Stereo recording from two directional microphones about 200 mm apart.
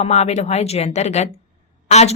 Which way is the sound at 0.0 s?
35° left (ahead or behind).